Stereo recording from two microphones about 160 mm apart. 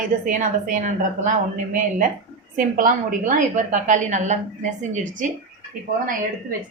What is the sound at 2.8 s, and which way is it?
A woman's voice, 55° right (ahead or behind).